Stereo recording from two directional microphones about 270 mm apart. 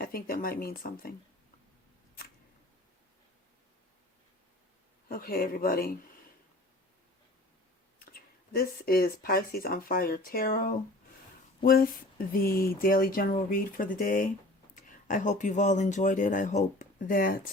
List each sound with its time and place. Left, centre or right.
0.0 s speech: left
5.0 s speech: left
8.1 s speech: left